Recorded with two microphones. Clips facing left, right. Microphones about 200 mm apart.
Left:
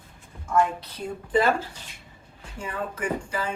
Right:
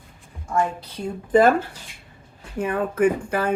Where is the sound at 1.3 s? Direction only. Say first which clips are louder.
Right 6 dB; 50° right (ahead or behind).